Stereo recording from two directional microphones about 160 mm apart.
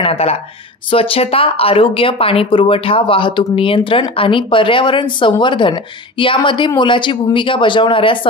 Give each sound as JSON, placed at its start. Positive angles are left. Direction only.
{"t": 0.0, "sound": "speech", "side_deg": 35}